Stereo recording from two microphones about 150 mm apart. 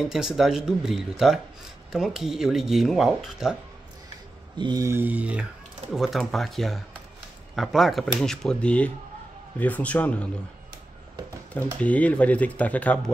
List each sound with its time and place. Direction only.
0.0 s speech: 5° right (ahead or behind)
4.6 s mantra: 30° right (ahead or behind)
4.8 s speech: 15° right (ahead or behind); by 10.2 s 10° left (ahead or behind)
11.8 s speech: 10° left (ahead or behind)